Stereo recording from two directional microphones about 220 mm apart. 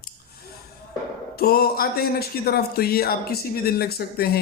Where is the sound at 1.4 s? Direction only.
45° left (ahead or behind).